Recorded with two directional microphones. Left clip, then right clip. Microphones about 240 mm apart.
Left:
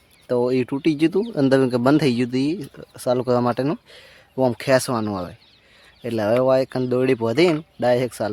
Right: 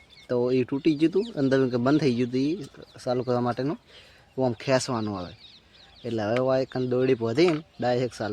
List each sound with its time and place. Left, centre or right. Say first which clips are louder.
0.3 s speech: left 4 dB; centre